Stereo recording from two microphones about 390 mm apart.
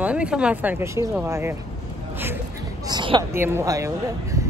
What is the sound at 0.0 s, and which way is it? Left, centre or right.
Speech, centre.